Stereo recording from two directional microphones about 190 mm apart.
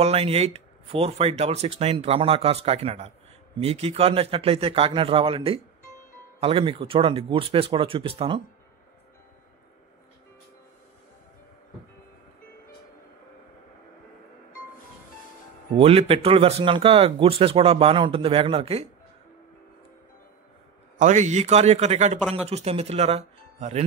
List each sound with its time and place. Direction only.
0.0 s speech: 35° right (ahead or behind)
15.7 s speech: 30° right (ahead or behind)
21.0 s speech: 40° right (ahead or behind)